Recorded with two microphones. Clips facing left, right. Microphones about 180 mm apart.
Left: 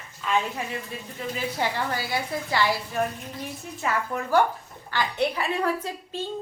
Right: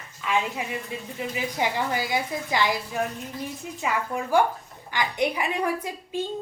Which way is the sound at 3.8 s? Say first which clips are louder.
Even; 15° right (ahead or behind).